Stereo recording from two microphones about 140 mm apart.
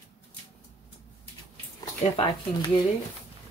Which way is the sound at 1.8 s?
30° left (ahead or behind).